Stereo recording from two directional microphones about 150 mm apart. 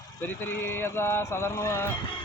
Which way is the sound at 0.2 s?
15° left (ahead or behind).